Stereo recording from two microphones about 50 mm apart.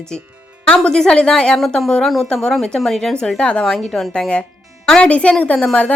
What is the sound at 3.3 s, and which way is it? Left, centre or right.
Speech, left.